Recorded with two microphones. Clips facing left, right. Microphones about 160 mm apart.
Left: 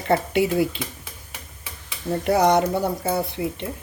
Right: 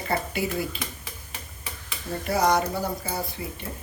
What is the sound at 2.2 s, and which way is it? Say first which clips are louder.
Speech: left 5 dB; 70° left (ahead or behind).